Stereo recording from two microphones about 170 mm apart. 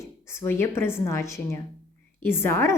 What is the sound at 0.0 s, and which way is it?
A woman's voice, 15° left (ahead or behind).